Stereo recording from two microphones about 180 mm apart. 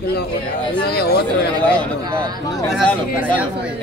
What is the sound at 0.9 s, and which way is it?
Speech, 60° left (ahead or behind).